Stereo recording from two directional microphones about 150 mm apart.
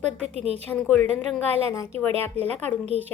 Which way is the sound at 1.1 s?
10° left (ahead or behind).